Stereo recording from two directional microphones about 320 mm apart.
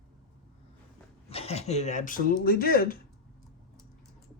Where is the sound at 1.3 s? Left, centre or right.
Centre.